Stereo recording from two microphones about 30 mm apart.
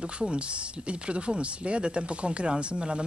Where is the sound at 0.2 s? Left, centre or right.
Right.